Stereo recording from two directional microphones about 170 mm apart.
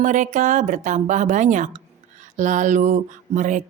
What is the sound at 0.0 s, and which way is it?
Speech, 45° right (ahead or behind).